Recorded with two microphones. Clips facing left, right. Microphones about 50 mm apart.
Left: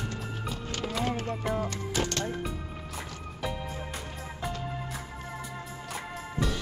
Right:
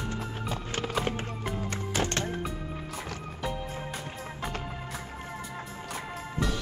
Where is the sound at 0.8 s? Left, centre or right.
Right.